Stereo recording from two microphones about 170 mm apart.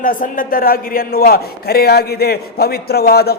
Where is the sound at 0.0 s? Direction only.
55° left (ahead or behind).